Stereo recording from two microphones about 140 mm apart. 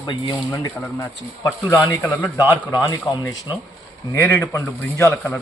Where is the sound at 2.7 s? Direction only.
25° left (ahead or behind).